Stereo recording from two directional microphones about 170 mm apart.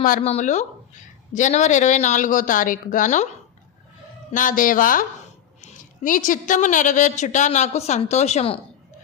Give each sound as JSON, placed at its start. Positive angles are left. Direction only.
{"t": 0.2, "sound": "a woman's voice", "side_deg": 40}
{"t": 4.3, "sound": "a woman's voice", "side_deg": 50}